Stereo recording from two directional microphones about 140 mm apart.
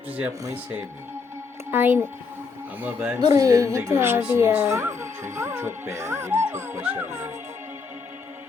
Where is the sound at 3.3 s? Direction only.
25° right (ahead or behind).